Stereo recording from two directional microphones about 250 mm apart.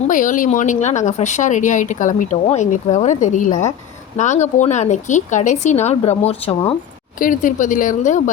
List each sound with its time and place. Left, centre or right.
0.1 s speech: left